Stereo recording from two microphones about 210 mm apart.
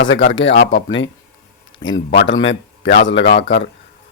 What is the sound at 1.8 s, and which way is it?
A man's voice, 60° left (ahead or behind).